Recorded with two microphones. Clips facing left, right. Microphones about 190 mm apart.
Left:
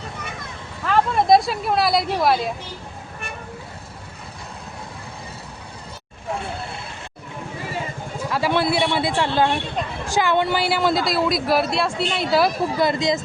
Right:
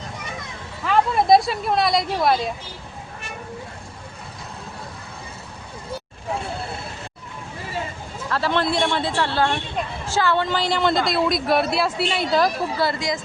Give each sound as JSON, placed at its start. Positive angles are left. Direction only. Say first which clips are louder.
{"t": 0.9, "sound": "speech", "louder": "even", "side_deg": 0}
{"t": 8.3, "sound": "a man's voice", "louder": "left 1 dB", "side_deg": 10}
{"t": 12.8, "sound": "speech", "louder": "left 4 dB", "side_deg": 20}